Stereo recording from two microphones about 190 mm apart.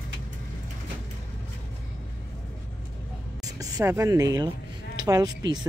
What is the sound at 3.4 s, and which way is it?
A woman's voice, 20° right (ahead or behind).